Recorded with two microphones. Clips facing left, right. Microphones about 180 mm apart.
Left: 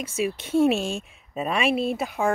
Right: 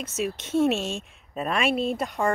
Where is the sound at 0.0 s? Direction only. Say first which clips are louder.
Left 2 dB; 10° left (ahead or behind).